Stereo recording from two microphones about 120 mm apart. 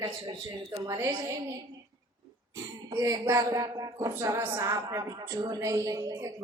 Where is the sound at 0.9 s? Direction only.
25° right (ahead or behind).